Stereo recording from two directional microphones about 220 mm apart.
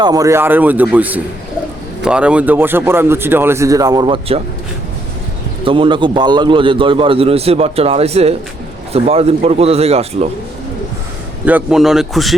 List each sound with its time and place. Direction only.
0.0 s speech: 15° right (ahead or behind)
5.6 s a man's voice: 25° right (ahead or behind)
11.4 s a man's voice: 5° right (ahead or behind)